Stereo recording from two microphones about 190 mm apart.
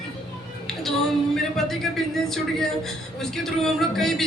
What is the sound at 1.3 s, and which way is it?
A man's voice, centre (ahead or behind).